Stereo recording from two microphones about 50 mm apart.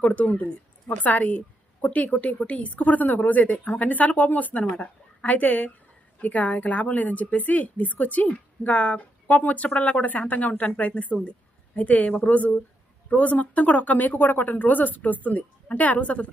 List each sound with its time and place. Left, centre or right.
0.0 s a woman's voice: left
4.6 s a woman's voice: centre
5.2 s a woman's voice: left
9.6 s a woman's voice: left